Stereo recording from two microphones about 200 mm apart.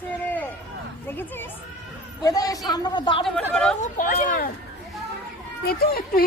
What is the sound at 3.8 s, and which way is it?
Speech, 40° left (ahead or behind).